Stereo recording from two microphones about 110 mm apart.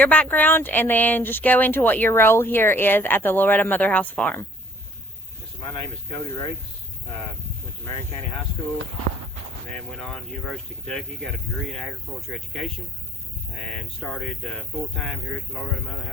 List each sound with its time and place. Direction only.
0.0 s speech: 15° left (ahead or behind)
9.7 s speech: 5° left (ahead or behind)
12.3 s speech: centre (ahead or behind)
14.0 s speech: 5° left (ahead or behind)